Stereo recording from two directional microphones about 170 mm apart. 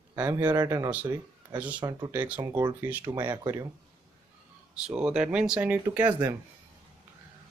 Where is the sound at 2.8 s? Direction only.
10° right (ahead or behind).